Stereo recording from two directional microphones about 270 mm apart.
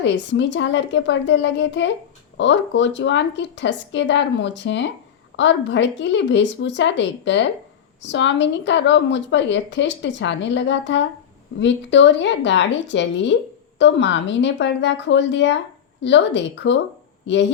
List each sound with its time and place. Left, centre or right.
0.0 s a woman's voice: left